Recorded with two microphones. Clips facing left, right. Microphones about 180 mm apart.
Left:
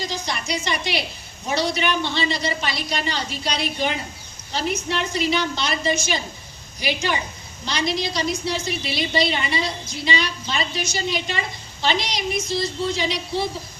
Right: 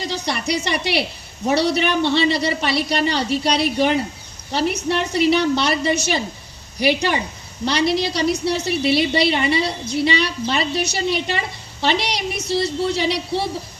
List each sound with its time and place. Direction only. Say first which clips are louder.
0.1 s a woman's voice: right 5 dB; 65° right (ahead or behind)